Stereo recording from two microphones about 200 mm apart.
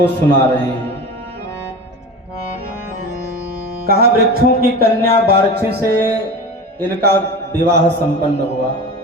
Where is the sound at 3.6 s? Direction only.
50° right (ahead or behind).